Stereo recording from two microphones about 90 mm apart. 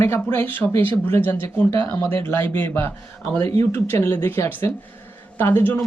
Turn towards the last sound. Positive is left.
turn(degrees=25)  # may be behind; listen again after turning